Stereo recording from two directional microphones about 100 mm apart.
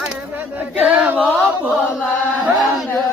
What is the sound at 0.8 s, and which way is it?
Chant, 15° right (ahead or behind).